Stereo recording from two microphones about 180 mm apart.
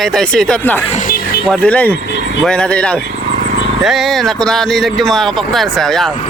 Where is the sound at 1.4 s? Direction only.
5° left (ahead or behind).